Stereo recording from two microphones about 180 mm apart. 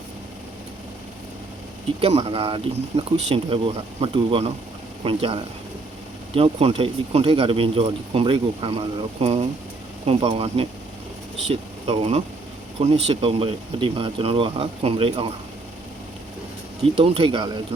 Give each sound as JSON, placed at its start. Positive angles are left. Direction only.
{"t": 2.0, "sound": "speech", "side_deg": -35}
{"t": 17.0, "sound": "speech", "side_deg": -30}